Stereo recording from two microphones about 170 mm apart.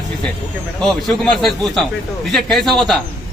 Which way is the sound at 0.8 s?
5° left (ahead or behind).